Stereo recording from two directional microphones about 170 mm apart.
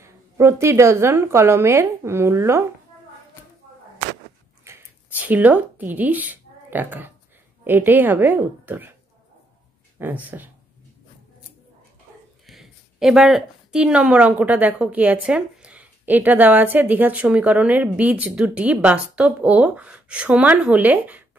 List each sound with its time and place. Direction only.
0.0 s a woman's voice: 15° right (ahead or behind)
4.6 s a sound: 10° right (ahead or behind)
7.6 s a woman's voice: 10° right (ahead or behind)
9.9 s a woman's voice: 10° right (ahead or behind)
12.4 s a woman's voice: centre (ahead or behind)